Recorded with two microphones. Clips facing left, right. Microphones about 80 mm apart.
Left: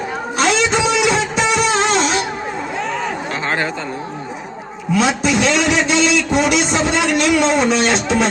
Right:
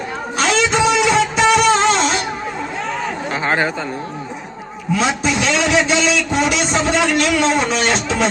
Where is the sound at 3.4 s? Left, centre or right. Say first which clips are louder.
Right 3 dB; centre.